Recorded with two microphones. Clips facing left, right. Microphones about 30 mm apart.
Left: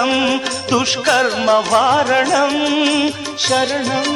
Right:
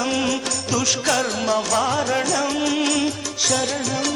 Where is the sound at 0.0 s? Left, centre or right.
Left.